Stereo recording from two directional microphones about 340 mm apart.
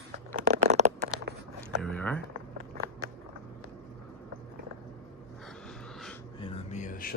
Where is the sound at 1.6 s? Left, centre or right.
Centre.